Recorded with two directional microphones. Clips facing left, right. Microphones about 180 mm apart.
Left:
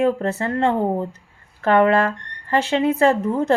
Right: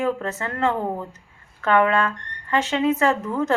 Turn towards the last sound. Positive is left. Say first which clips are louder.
# left 4 dB
turn(degrees=30)  # may be behind; listen again after turning